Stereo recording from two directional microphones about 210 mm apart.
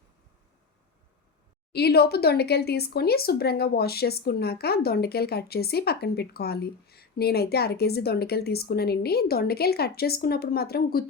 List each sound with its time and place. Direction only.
1.7 s speech: 50° left (ahead or behind)